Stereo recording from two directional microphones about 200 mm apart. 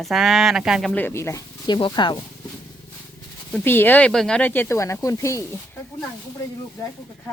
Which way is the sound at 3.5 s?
10° left (ahead or behind).